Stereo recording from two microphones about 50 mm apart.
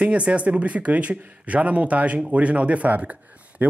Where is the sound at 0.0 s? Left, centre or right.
Right.